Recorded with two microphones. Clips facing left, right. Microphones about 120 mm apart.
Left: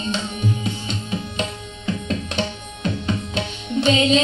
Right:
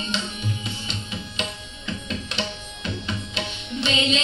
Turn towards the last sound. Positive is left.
turn(degrees=45)  # may be behind; listen again after turning